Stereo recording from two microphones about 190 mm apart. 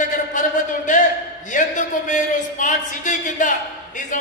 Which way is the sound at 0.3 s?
40° left (ahead or behind).